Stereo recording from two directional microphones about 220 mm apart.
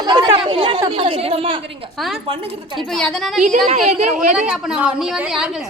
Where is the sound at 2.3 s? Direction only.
20° right (ahead or behind).